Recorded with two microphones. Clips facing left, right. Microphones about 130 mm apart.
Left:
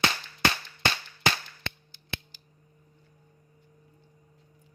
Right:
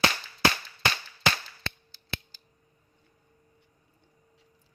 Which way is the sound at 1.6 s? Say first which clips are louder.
Even; 20° left (ahead or behind).